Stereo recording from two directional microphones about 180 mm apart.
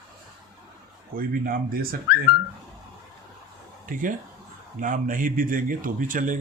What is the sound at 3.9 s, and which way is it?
Speech, 50° right (ahead or behind).